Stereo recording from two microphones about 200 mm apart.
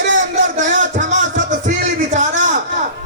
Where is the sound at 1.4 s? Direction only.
40° right (ahead or behind).